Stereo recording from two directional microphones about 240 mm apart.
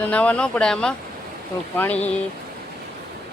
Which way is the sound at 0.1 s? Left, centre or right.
Centre.